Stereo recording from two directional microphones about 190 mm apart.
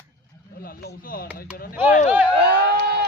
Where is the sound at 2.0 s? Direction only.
10° right (ahead or behind).